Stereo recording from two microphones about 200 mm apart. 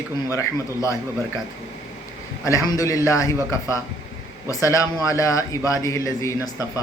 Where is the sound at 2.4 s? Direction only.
15° left (ahead or behind).